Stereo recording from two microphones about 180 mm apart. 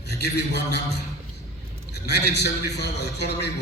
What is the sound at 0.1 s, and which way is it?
A man's voice, 65° left (ahead or behind).